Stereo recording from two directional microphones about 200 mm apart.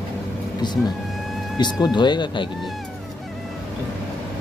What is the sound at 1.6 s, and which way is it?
Speech, 20° left (ahead or behind).